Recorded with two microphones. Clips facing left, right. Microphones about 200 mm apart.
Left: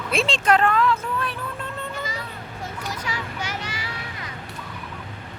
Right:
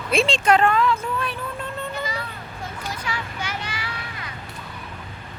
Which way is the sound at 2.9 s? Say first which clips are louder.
Even; 40° left (ahead or behind).